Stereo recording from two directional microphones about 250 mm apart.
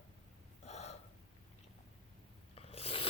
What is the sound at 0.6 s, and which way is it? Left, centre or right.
Gasp, left.